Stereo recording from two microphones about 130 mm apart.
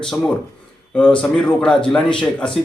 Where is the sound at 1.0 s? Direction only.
5° left (ahead or behind).